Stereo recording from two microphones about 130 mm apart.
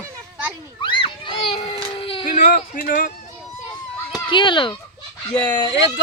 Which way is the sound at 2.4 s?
85° left.